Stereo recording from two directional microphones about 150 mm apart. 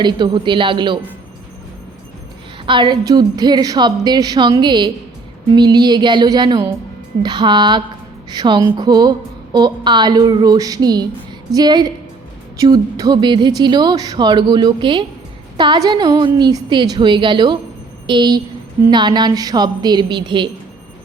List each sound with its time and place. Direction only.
0.0 s a woman's voice: 30° right (ahead or behind)
2.6 s a woman's voice: 30° right (ahead or behind)